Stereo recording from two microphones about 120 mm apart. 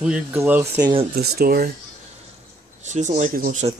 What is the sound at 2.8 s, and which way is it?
Speech, 85° right.